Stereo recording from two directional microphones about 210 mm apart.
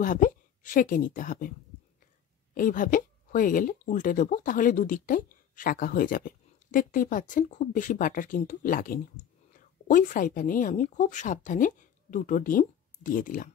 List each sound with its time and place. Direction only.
0.0 s a woman's voice: 40° left (ahead or behind)
2.5 s speech: 40° left (ahead or behind)